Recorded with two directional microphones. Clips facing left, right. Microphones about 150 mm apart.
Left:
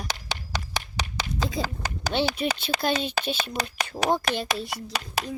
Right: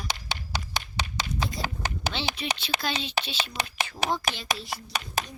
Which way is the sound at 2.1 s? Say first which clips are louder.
Left 8 dB; 50° left (ahead or behind).